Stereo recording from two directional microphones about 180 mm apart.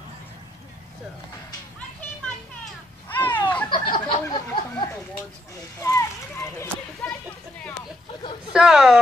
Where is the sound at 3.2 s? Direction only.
10° left (ahead or behind).